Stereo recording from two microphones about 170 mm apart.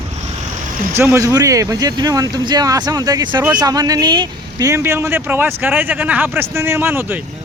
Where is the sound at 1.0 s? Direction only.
15° right (ahead or behind).